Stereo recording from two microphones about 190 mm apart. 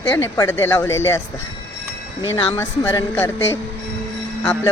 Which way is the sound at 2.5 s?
15° left (ahead or behind).